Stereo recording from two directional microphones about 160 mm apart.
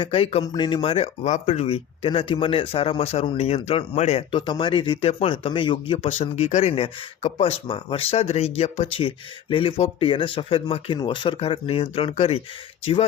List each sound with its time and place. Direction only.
0.0 s speech: 35° left (ahead or behind)
4.4 s speech: 30° left (ahead or behind)
7.7 s speech: 35° left (ahead or behind)